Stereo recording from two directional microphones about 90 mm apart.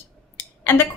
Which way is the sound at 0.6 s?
25° left (ahead or behind).